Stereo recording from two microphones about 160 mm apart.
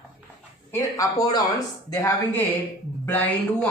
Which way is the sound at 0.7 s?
20° left (ahead or behind).